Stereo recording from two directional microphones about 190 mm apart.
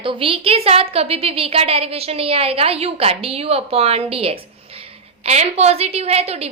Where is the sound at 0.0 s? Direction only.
25° right (ahead or behind).